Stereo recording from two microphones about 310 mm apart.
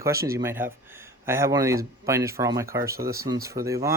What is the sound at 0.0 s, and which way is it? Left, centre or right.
Speech, centre.